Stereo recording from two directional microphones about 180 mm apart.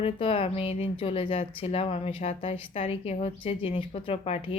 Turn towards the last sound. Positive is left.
turn(degrees=35)  # may be behind; listen again after turning